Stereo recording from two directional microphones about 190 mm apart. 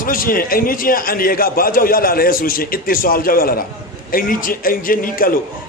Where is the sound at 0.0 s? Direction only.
50° left (ahead or behind).